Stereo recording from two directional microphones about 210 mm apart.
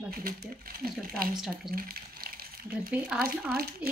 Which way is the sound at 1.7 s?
45° right (ahead or behind).